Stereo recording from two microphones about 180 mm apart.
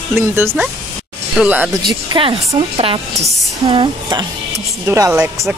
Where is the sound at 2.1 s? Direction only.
25° right (ahead or behind).